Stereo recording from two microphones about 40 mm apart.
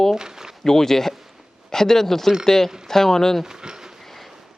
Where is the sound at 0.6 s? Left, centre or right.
Centre.